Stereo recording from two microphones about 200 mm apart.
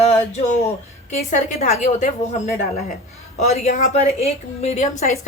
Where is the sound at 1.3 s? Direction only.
40° left (ahead or behind).